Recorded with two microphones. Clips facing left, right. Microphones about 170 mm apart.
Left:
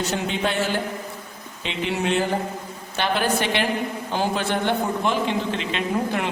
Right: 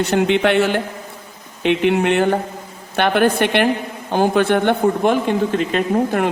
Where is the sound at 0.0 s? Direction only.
65° right (ahead or behind).